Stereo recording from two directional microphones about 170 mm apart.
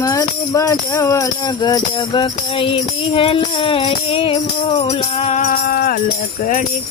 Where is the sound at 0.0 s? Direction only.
20° left (ahead or behind).